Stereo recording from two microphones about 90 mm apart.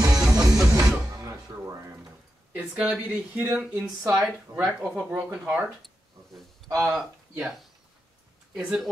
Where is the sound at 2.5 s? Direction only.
15° right (ahead or behind).